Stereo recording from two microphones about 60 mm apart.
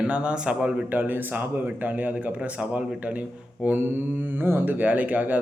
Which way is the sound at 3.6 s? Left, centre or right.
Right.